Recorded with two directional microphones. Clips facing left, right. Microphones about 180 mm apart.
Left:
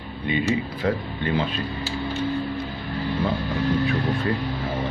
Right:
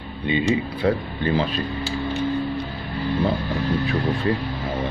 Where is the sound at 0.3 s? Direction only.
30° right (ahead or behind).